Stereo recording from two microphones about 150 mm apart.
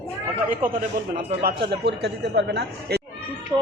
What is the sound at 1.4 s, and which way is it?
A man's voice, 90° right.